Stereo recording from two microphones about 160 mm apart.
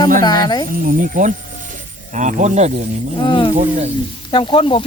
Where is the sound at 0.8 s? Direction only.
55° right (ahead or behind).